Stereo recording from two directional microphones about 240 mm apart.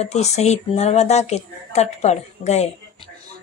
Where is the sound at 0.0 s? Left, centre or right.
Left.